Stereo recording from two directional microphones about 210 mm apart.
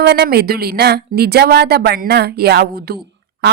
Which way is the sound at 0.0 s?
50° right (ahead or behind).